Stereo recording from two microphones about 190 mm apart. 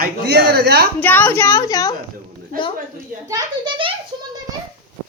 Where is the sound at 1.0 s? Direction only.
10° left (ahead or behind).